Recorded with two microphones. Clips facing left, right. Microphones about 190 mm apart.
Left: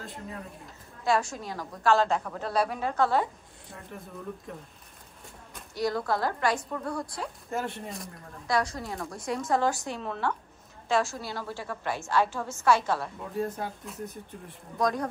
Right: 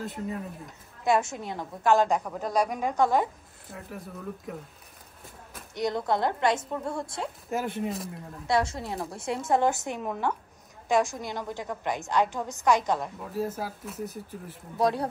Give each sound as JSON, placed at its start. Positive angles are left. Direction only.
{"t": 1.0, "sound": "a woman's voice", "side_deg": -20}
{"t": 5.8, "sound": "a woman's voice", "side_deg": -20}
{"t": 7.4, "sound": "speech", "side_deg": 0}
{"t": 8.5, "sound": "a woman's voice", "side_deg": -25}
{"t": 13.2, "sound": "speech", "side_deg": -5}
{"t": 14.8, "sound": "speech", "side_deg": -30}